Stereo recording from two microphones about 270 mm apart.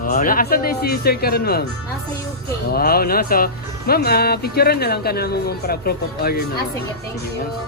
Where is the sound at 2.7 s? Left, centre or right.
Left.